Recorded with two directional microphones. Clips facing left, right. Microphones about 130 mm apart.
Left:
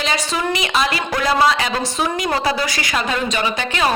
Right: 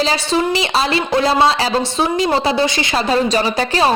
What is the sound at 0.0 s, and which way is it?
A woman's voice, 30° right (ahead or behind).